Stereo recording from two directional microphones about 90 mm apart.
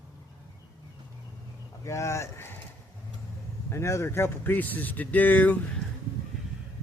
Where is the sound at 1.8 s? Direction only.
35° left (ahead or behind).